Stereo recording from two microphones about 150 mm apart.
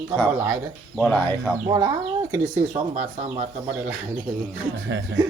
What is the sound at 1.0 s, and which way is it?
Speech, 5° left (ahead or behind).